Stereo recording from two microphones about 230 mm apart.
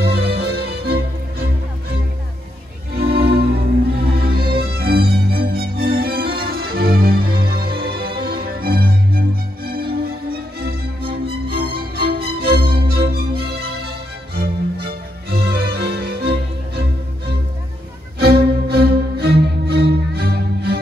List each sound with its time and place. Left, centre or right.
0.0 s music: right
11.7 s music: right
18.2 s music: right